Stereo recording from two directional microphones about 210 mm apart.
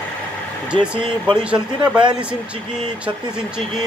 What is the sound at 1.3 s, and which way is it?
Speech, 5° right (ahead or behind).